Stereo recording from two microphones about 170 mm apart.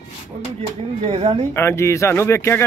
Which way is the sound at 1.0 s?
35° right (ahead or behind).